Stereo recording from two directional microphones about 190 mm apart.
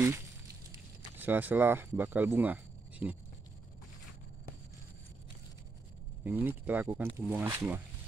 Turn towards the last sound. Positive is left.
turn(degrees=-10)  # may be behind; listen again after turning